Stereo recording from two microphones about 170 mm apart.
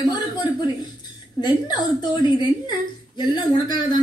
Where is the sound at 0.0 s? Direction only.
25° left (ahead or behind).